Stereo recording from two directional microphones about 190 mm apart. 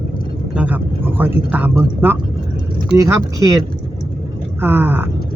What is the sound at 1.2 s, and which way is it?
Speech, 10° right (ahead or behind).